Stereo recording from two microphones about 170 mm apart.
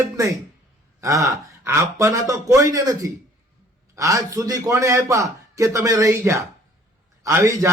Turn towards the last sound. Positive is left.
turn(degrees=-20)  # may be behind; listen again after turning